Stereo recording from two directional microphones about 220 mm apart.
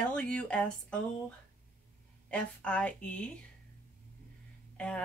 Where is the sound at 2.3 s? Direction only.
5° left (ahead or behind).